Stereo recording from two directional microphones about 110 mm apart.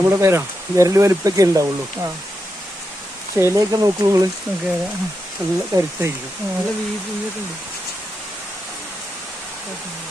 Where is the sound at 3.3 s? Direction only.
30° right (ahead or behind).